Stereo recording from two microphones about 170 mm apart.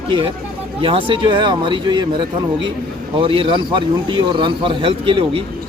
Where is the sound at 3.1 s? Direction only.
30° right (ahead or behind).